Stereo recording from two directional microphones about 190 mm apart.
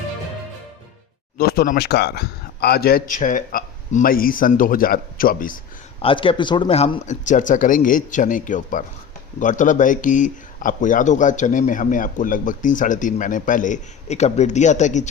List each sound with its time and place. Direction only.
1.4 s speech: 50° left (ahead or behind)
6.0 s speech: 30° left (ahead or behind)